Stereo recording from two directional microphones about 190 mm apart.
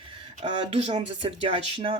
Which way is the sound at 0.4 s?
35° right (ahead or behind).